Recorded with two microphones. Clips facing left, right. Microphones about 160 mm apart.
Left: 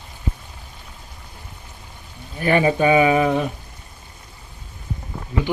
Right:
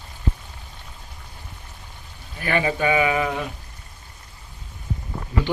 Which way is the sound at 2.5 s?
25° left (ahead or behind).